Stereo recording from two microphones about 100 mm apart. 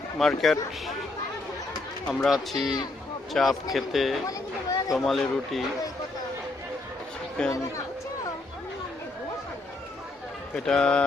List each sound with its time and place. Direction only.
0.2 s speech: 5° left (ahead or behind)
2.0 s speech: 10° left (ahead or behind)
2.5 s speech: 5° right (ahead or behind)
4.3 s speech: 35° left (ahead or behind)
4.9 s speech: centre (ahead or behind)
7.4 s speech: 10° left (ahead or behind)
10.5 s speech: 5° left (ahead or behind)